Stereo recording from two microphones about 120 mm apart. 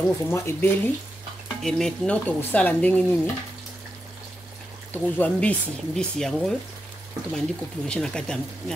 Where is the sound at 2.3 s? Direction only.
15° left (ahead or behind).